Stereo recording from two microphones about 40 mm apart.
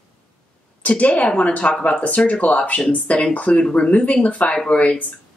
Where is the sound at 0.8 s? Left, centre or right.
Left.